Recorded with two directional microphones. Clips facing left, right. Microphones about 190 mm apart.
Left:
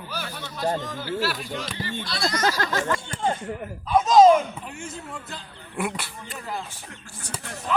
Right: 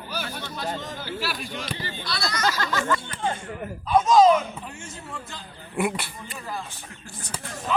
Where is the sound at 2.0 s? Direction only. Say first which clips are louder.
Left 2 dB; 45° left (ahead or behind).